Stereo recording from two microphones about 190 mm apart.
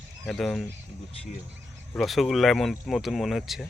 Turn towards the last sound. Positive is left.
turn(degrees=0)  # may be behind; listen again after turning